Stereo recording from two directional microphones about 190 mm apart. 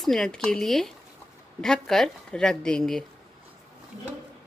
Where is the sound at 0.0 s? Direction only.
5° left (ahead or behind).